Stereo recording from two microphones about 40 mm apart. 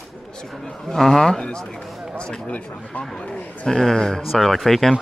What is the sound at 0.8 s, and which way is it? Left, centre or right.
Speech, centre.